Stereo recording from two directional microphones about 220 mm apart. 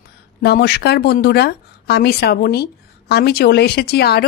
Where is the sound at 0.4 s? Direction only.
45° left (ahead or behind).